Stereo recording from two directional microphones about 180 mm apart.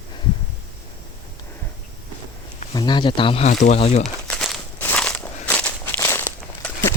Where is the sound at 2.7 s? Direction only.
25° left (ahead or behind).